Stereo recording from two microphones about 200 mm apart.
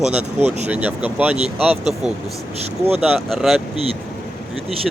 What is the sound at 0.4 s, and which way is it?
Speech, 35° right (ahead or behind).